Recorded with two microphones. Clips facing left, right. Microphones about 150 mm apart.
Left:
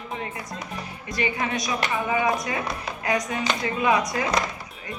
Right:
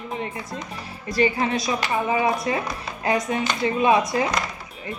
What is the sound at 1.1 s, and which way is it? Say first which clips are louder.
A woman's voice: right 6 dB; 35° right (ahead or behind).